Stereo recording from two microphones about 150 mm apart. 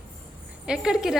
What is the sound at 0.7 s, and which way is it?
Speech, 5° right (ahead or behind).